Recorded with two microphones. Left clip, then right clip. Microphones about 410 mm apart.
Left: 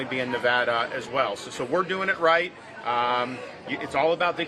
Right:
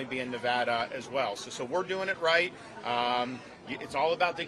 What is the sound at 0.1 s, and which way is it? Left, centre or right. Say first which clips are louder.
Speech: left 7 dB; right.